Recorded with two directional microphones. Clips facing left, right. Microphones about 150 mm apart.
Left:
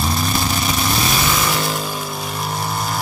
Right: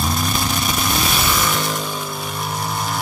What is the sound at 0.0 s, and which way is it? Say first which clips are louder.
Vehicle: left 1 dB; centre (ahead or behind).